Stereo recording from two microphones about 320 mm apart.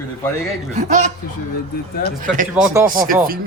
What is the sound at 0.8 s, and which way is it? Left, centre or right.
Speech, right.